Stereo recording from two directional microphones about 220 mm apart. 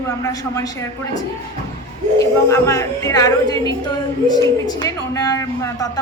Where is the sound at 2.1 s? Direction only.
15° left (ahead or behind).